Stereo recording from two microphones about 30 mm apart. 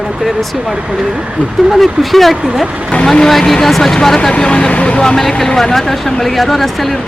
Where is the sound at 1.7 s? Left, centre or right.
Centre.